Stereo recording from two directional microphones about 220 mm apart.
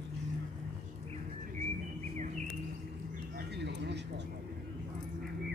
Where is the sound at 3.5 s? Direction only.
50° right (ahead or behind).